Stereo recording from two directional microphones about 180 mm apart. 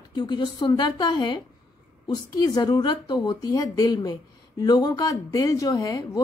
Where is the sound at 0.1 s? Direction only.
25° left (ahead or behind).